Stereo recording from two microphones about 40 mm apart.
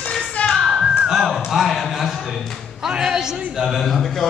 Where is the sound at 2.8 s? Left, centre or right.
Centre.